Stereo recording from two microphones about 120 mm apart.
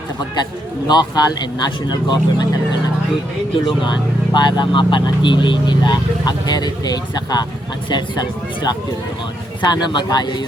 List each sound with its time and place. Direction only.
0.9 s speech: 35° left (ahead or behind)
3.7 s speech: 40° left (ahead or behind)